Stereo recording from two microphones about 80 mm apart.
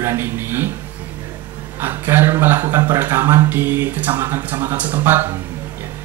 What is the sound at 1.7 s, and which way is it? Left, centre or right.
A man's voice, right.